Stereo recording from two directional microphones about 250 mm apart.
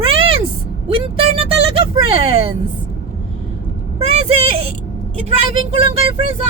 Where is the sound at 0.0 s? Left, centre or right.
Right.